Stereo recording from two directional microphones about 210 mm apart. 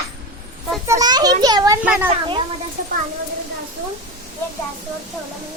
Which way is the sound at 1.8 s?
5° right (ahead or behind).